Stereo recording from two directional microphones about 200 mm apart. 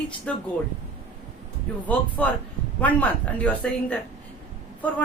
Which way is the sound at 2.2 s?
5° left (ahead or behind).